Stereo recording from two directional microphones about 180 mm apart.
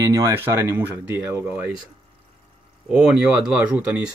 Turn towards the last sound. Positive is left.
turn(degrees=-5)  # may be behind; listen again after turning